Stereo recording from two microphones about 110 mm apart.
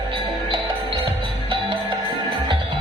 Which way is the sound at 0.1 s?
50° right (ahead or behind).